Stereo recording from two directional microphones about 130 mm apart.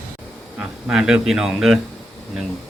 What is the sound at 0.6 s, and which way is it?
Speech, 5° right (ahead or behind).